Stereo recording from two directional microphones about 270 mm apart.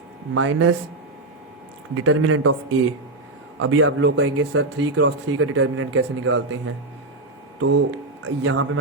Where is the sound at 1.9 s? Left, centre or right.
Right.